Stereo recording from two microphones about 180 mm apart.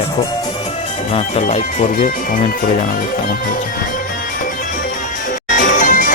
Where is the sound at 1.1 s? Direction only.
40° left (ahead or behind).